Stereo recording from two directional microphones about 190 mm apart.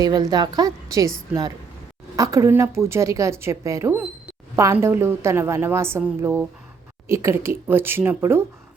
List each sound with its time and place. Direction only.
0.0 s a woman's voice: 20° right (ahead or behind)